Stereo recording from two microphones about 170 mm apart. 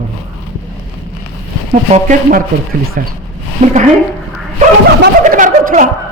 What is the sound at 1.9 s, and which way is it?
Speech, 45° right (ahead or behind).